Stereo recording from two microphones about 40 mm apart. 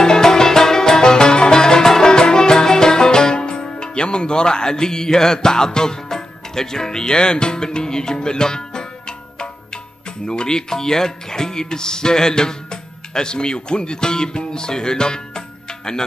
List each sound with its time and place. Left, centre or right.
0.0 s music: centre
10.2 s speech: left